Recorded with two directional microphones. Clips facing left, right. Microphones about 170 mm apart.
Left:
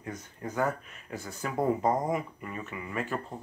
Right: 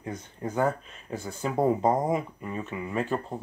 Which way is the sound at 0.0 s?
25° right (ahead or behind).